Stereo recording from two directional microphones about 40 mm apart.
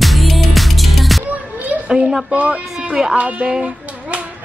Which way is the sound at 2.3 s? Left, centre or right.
Right.